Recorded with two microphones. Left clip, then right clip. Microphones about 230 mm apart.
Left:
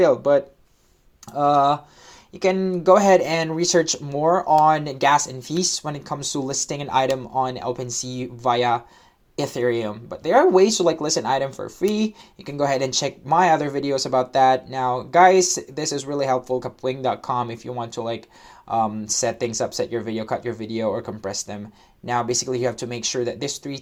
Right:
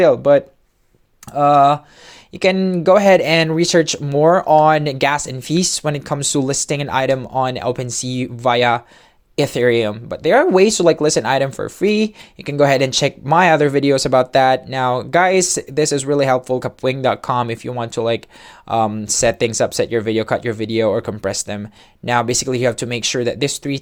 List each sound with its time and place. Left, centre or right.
0.0 s speech: right